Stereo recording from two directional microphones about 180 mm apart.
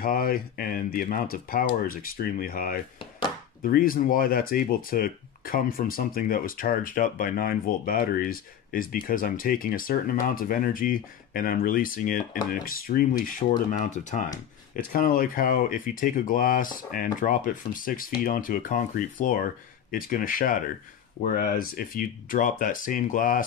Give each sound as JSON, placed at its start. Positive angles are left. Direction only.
{"t": 0.0, "sound": "speech", "side_deg": 55}